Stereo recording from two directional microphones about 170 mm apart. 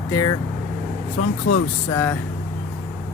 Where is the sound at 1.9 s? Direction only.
15° left (ahead or behind).